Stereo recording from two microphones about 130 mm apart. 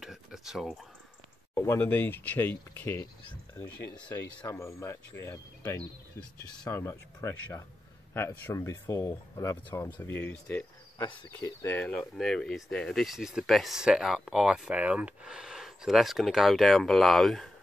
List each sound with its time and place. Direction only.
0.0 s a sound: 5° right (ahead or behind)
1.5 s speech: 15° left (ahead or behind)
4.5 s speech: 20° left (ahead or behind)
11.4 s speech: 15° left (ahead or behind)